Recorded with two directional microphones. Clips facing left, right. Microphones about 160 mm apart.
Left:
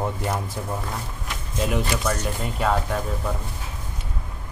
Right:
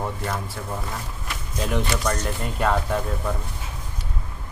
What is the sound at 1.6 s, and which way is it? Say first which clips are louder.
Speech: even; 5° left (ahead or behind).